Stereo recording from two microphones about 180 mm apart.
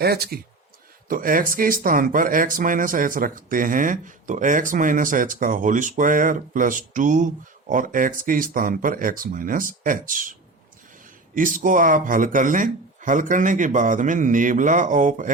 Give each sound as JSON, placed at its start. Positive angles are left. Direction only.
{"t": 0.0, "sound": "speech", "side_deg": -60}
{"t": 11.3, "sound": "speech", "side_deg": -45}